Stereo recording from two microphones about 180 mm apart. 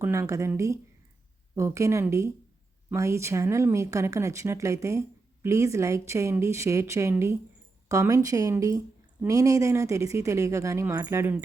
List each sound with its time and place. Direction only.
0.0 s speech: 15° right (ahead or behind)